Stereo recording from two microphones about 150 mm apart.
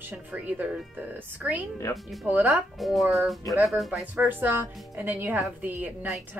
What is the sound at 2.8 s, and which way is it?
Speech, centre (ahead or behind).